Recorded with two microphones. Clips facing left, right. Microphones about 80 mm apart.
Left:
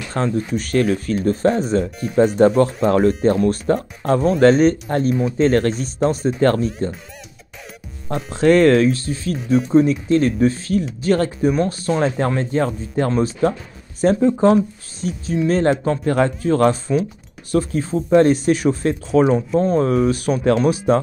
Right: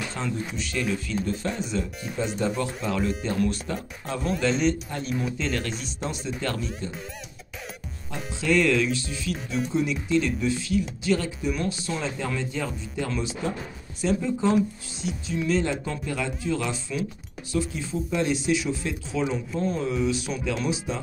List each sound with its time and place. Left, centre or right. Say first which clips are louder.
0.1 s speech: left 10 dB; left
8.1 s speech: left 10 dB; left